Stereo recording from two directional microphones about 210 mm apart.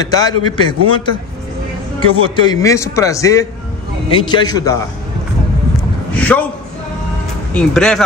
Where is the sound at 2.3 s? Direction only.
15° left (ahead or behind).